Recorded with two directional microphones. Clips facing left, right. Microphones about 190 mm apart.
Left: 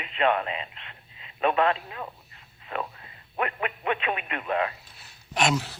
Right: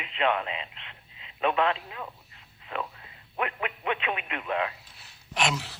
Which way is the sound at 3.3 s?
45° left (ahead or behind).